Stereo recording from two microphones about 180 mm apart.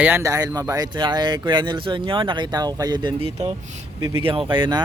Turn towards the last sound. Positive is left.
turn(degrees=-25)  # may be behind; listen again after turning